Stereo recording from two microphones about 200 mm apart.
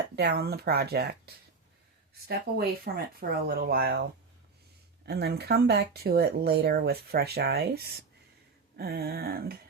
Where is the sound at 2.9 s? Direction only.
45° right (ahead or behind).